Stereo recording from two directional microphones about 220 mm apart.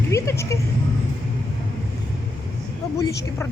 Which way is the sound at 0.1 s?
15° left (ahead or behind).